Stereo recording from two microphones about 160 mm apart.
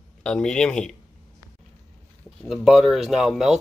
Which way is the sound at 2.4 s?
Centre (ahead or behind).